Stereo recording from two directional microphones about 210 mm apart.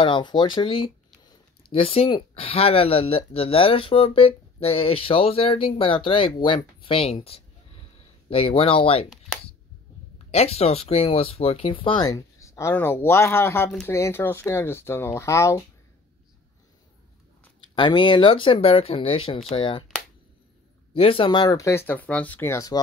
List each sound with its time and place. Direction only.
0.0 s speech: 20° left (ahead or behind)
10.3 s speech: 30° left (ahead or behind); by 15.6 s 15° left (ahead or behind)
17.7 s speech: 20° left (ahead or behind)
20.9 s speech: 25° left (ahead or behind)